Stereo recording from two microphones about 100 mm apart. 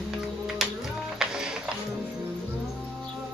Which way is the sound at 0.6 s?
5° right (ahead or behind).